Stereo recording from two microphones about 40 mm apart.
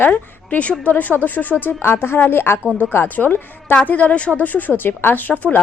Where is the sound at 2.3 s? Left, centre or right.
Left.